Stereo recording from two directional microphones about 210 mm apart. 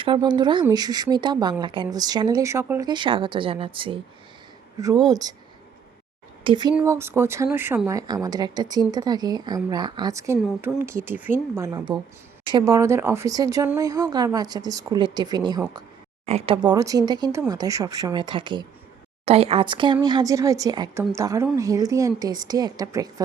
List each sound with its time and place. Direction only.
0.0 s speech: 25° right (ahead or behind)
6.4 s speech: 20° right (ahead or behind)